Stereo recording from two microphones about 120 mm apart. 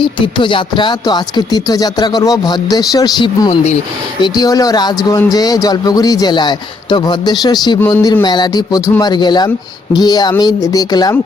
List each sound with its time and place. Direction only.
0.0 s speech: 40° left (ahead or behind)
3.5 s speech: 65° left (ahead or behind)
4.2 s speech: 35° left (ahead or behind)